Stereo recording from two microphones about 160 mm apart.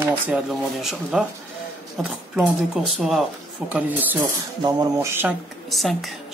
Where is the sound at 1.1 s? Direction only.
5° right (ahead or behind).